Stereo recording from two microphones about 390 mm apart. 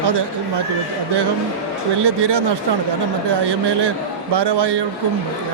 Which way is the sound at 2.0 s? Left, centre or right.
Right.